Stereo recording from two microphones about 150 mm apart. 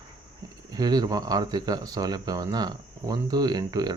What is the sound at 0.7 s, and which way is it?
Speech, 25° right (ahead or behind).